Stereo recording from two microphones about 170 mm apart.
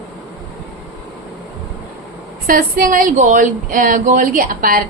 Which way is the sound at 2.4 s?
55° right (ahead or behind).